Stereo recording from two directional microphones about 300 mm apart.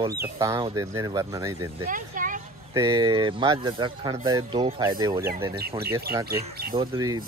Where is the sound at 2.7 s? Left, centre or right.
Centre.